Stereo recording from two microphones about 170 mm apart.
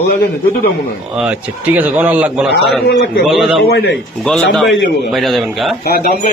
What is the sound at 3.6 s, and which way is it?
Speech, 70° left (ahead or behind).